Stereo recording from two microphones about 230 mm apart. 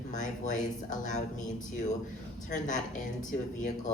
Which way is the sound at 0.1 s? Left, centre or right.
Left.